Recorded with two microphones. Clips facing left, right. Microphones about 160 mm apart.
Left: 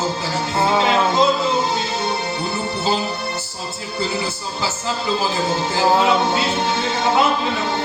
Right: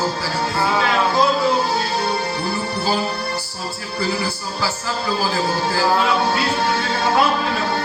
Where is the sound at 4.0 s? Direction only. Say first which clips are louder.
Right 1 dB; 20° left (ahead or behind).